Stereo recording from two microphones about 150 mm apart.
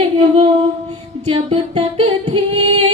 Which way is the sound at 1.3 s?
40° right (ahead or behind).